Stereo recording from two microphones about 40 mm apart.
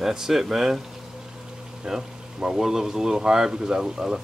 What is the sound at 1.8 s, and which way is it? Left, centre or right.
Speech, centre.